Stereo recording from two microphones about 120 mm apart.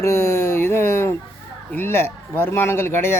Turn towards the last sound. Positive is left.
turn(degrees=20)  # may be behind; listen again after turning